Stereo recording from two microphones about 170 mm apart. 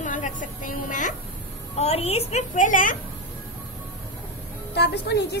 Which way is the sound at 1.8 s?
40° left (ahead or behind).